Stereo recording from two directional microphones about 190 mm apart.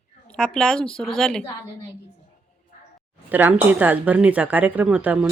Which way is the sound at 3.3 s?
10° right (ahead or behind).